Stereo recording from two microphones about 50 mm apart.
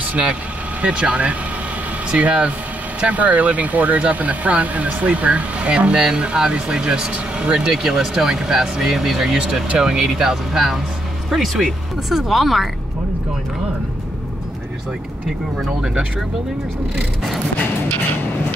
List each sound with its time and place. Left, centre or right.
0.0 s vehicle: right
0.8 s speech: right; by 12.6 s centre
15.2 s speech: centre